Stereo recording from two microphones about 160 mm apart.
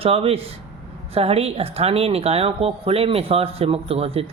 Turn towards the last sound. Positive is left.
turn(degrees=-40)  # may be behind; listen again after turning